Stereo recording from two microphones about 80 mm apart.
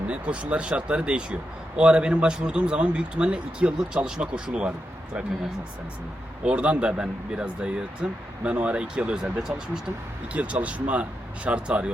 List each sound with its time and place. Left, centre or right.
0.1 s speech: centre
6.4 s speech: centre